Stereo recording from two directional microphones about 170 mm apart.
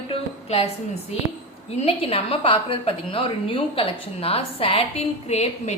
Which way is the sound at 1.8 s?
35° left (ahead or behind).